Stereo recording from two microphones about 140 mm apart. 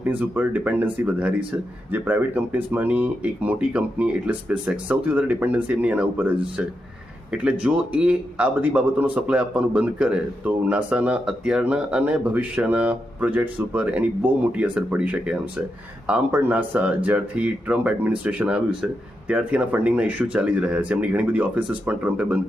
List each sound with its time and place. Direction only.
0.0 s a man's voice: 10° right (ahead or behind)